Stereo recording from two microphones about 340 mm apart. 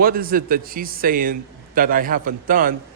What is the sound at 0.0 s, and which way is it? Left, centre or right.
A man's voice, right.